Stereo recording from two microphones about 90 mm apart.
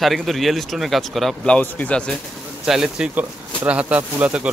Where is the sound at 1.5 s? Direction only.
15° left (ahead or behind).